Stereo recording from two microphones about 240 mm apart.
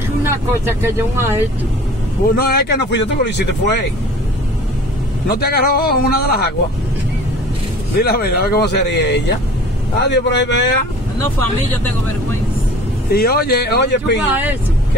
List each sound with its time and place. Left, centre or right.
0.3 s speech: centre
2.3 s speech: left
5.3 s speech: left
7.9 s speech: left
13.1 s speech: left